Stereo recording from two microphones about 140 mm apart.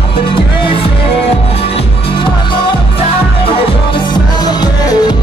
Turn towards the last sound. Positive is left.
turn(degrees=30)  # may be behind; listen again after turning